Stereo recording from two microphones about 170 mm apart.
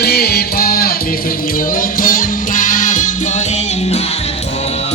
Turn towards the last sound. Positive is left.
turn(degrees=50)  # may be behind; listen again after turning